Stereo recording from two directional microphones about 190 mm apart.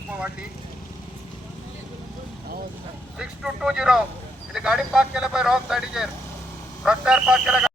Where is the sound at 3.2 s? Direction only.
5° right (ahead or behind).